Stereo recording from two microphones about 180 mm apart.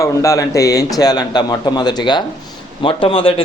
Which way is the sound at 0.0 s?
20° left (ahead or behind).